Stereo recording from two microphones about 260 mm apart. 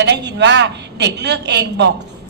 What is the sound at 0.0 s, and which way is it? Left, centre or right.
A woman's voice, right.